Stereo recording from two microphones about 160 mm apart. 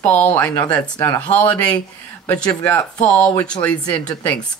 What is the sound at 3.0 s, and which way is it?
Speech, 10° left (ahead or behind).